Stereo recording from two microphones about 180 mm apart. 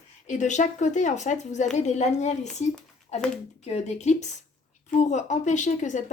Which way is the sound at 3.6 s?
35° left (ahead or behind).